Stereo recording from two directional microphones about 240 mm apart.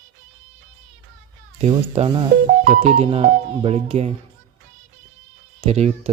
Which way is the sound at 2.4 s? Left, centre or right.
Right.